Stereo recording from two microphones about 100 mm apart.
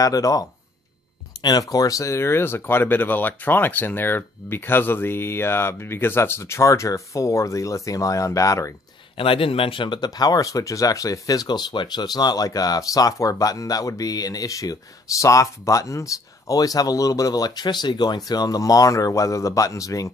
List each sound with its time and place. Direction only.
0.0 s speech: 35° left (ahead or behind)
9.1 s speech: 65° left (ahead or behind); by 20.1 s 35° left (ahead or behind)